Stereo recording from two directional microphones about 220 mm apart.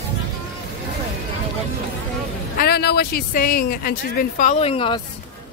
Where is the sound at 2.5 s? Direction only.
45° left (ahead or behind); by 5.0 s 25° left (ahead or behind).